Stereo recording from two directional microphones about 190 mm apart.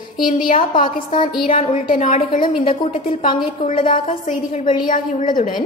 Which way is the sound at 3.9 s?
40° left (ahead or behind).